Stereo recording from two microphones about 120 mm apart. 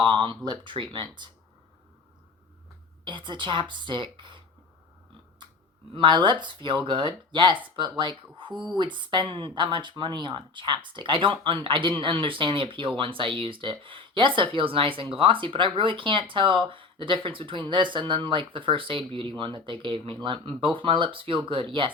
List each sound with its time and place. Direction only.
0.0 s speech: 40° right (ahead or behind)
3.0 s speech: 40° right (ahead or behind)
5.9 s speech: 40° right (ahead or behind)